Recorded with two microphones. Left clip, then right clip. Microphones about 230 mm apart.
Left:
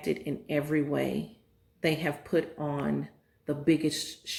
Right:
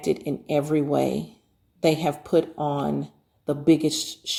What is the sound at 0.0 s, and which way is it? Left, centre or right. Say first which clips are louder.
Speech: right 6 dB; right.